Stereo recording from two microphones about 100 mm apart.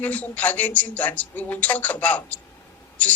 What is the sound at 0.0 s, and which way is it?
Speech, 15° left (ahead or behind).